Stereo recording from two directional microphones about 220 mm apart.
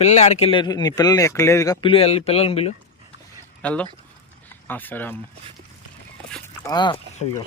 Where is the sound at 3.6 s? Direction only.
5° left (ahead or behind).